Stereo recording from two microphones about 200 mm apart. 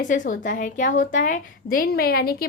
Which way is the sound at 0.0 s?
40° left (ahead or behind).